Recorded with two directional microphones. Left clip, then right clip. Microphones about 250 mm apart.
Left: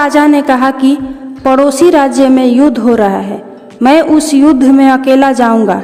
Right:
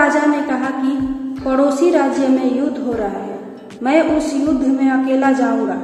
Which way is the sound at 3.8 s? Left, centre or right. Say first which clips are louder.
Left 8 dB; left.